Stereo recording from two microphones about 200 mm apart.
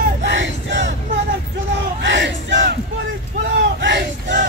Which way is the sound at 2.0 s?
65° right (ahead or behind).